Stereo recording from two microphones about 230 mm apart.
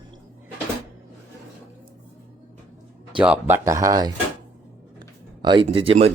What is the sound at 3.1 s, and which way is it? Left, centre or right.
Speech, centre.